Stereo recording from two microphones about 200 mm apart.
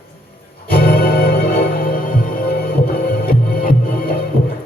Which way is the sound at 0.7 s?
50° left (ahead or behind).